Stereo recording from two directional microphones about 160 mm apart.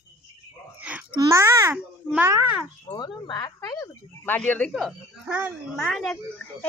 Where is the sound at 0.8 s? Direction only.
10° right (ahead or behind).